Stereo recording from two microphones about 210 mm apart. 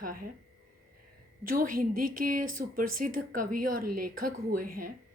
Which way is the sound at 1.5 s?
40° right (ahead or behind).